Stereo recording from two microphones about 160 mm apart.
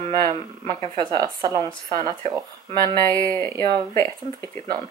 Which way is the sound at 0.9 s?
25° right (ahead or behind).